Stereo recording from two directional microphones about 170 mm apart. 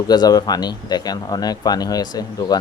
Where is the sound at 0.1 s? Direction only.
25° left (ahead or behind).